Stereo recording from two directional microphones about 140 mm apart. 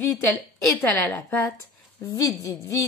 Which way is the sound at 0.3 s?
10° left (ahead or behind).